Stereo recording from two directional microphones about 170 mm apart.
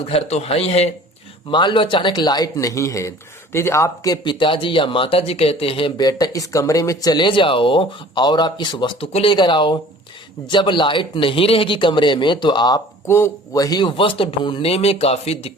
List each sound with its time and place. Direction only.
0.0 s a man's voice: 35° left (ahead or behind)